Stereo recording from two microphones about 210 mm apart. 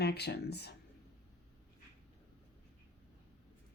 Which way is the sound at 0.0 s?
50° left (ahead or behind).